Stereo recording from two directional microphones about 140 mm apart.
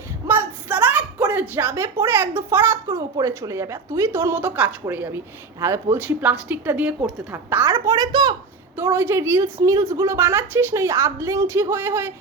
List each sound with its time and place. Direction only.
0.3 s a woman's voice: 15° right (ahead or behind); by 8.4 s 30° right (ahead or behind)
8.7 s a woman's voice: 15° right (ahead or behind)